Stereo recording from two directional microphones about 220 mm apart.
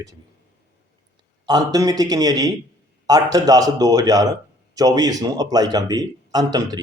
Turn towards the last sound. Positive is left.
turn(degrees=-15)  # may be behind; listen again after turning